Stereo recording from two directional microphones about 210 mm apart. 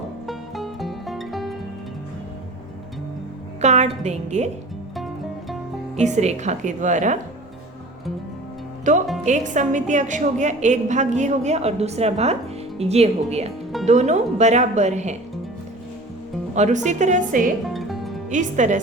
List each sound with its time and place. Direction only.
0.3 s music: centre (ahead or behind)
3.6 s a woman's voice: 35° right (ahead or behind)
6.0 s a woman's voice: 35° right (ahead or behind)
8.9 s a woman's voice: 35° right (ahead or behind)
16.6 s a woman's voice: 35° right (ahead or behind)
17.7 s music: centre (ahead or behind)
18.3 s a woman's voice: 35° right (ahead or behind)